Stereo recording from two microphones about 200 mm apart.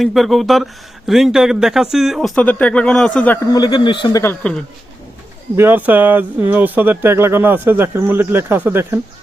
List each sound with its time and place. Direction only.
0.0 s speech: centre (ahead or behind)
3.5 s speech: 20° left (ahead or behind)
5.5 s speech: 10° right (ahead or behind)